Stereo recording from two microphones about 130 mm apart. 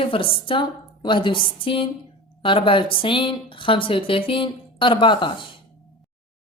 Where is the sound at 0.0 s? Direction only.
45° left (ahead or behind).